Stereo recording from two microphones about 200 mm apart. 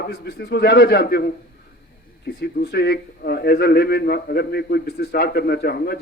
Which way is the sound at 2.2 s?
55° left (ahead or behind).